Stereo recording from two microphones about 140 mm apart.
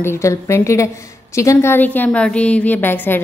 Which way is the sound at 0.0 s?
20° left (ahead or behind).